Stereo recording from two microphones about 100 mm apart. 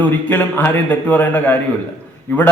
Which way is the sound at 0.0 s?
20° left (ahead or behind).